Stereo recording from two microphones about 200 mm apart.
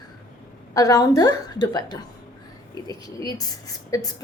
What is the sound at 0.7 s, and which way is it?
A woman's voice, 15° left (ahead or behind).